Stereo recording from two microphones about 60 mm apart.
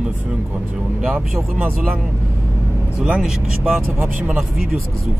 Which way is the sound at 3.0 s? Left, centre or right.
Centre.